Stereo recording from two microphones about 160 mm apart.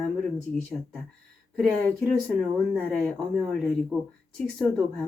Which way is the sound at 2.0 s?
Centre (ahead or behind).